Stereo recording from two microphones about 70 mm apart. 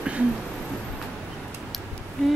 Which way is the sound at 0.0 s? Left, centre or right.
Centre.